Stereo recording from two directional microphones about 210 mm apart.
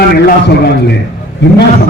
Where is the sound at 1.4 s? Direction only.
60° left (ahead or behind).